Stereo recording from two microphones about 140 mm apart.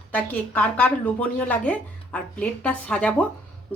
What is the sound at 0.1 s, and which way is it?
Speech, 10° left (ahead or behind).